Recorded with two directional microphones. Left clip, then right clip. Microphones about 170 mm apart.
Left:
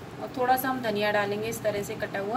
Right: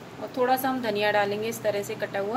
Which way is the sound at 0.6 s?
60° right (ahead or behind).